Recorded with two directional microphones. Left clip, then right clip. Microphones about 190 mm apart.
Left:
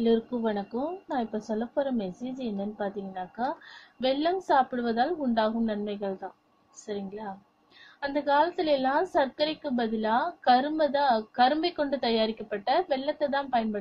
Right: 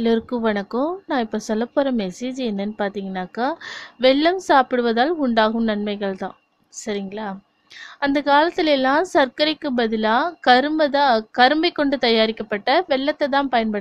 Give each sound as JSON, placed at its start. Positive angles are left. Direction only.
{"t": 0.0, "sound": "speech", "side_deg": -45}